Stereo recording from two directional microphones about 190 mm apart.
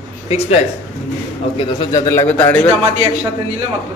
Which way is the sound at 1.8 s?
15° left (ahead or behind).